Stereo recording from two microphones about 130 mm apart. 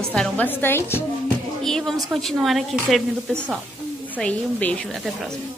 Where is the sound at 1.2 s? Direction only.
5° left (ahead or behind).